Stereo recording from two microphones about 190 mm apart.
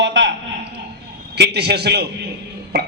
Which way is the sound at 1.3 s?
60° right (ahead or behind).